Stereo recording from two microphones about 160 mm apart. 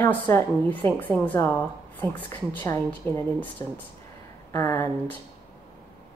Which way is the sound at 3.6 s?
20° left (ahead or behind).